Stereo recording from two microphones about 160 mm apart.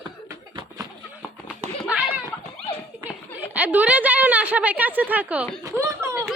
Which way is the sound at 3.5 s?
10° right (ahead or behind).